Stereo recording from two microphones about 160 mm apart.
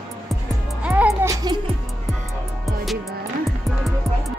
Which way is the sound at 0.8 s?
10° right (ahead or behind).